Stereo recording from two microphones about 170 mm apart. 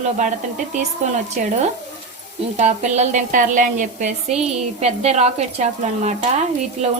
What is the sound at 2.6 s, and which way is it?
A woman's voice, 40° right (ahead or behind).